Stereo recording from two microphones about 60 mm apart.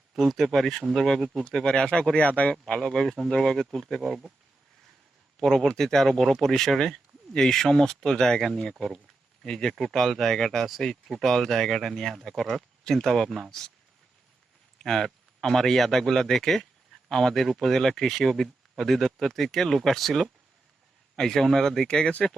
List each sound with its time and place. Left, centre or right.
0.1 s speech: centre
2.1 s speech: left
2.8 s speech: centre
4.0 s speech: centre
5.4 s speech: centre
14.8 s speech: centre